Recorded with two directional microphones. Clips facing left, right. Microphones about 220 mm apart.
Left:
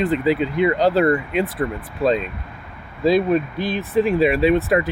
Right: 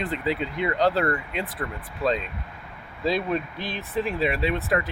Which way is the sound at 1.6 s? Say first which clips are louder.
Left 9 dB; 25° left (ahead or behind).